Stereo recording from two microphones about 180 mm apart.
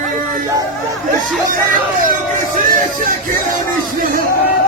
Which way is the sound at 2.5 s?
50° right (ahead or behind).